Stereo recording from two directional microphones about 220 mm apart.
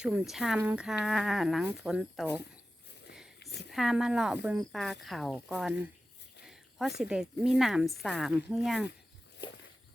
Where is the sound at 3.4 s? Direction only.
50° left (ahead or behind).